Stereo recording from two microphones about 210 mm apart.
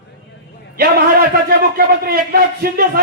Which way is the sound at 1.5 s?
45° right (ahead or behind).